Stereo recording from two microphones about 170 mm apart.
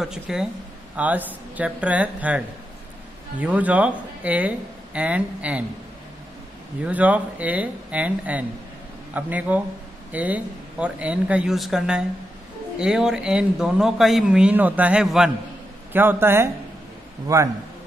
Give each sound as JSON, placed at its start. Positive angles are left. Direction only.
{"t": 0.0, "sound": "speech", "side_deg": -5}
{"t": 6.8, "sound": "a man's voice", "side_deg": -10}